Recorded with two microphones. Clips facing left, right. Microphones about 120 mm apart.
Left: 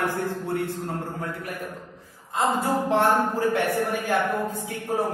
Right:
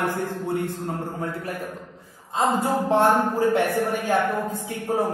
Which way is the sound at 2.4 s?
15° right (ahead or behind).